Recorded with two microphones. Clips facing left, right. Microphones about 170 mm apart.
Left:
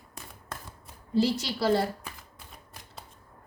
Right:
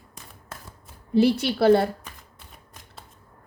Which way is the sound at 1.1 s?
60° right (ahead or behind).